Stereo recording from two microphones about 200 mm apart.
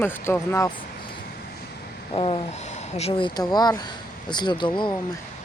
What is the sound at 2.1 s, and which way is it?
Vehicle, 25° left (ahead or behind).